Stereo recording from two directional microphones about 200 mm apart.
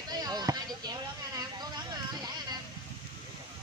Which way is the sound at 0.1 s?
20° right (ahead or behind).